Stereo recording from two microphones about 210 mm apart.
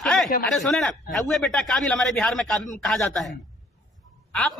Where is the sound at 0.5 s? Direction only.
5° left (ahead or behind).